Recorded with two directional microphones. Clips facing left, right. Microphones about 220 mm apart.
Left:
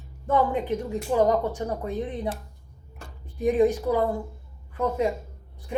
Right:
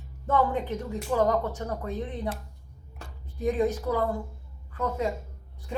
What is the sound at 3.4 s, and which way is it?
Speech, 15° left (ahead or behind).